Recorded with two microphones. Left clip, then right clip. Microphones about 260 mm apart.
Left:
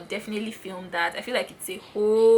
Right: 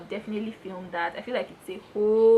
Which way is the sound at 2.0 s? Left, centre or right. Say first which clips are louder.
Left 1 dB; right.